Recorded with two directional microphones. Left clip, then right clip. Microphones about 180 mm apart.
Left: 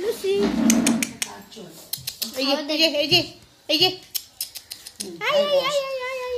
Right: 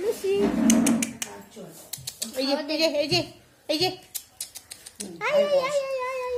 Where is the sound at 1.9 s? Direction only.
10° right (ahead or behind).